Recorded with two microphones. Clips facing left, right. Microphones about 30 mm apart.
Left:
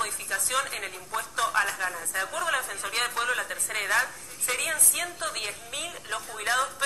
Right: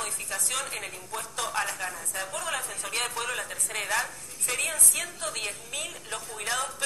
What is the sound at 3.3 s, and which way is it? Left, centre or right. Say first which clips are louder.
A woman's voice: left 4 dB; centre.